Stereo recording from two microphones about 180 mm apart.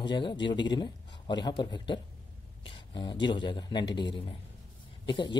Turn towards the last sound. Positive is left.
turn(degrees=25)  # may be behind; listen again after turning